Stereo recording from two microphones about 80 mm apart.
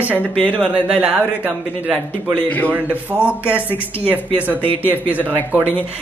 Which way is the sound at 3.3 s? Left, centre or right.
Centre.